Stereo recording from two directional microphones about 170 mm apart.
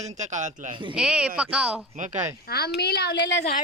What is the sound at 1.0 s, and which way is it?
Speech, 5° right (ahead or behind).